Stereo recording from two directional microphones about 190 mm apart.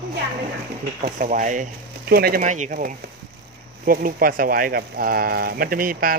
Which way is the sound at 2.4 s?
40° right (ahead or behind).